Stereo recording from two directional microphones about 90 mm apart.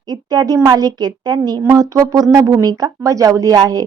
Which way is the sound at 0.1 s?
45° right (ahead or behind).